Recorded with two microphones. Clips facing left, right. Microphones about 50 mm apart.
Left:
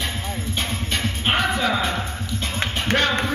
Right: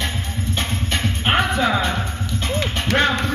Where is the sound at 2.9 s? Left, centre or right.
Centre.